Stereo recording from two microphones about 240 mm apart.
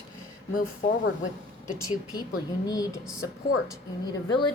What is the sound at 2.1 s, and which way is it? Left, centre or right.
Speech, centre.